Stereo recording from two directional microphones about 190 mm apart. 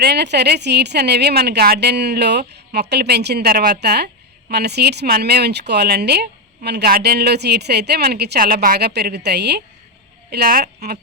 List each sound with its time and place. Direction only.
0.0 s speech: 60° right (ahead or behind)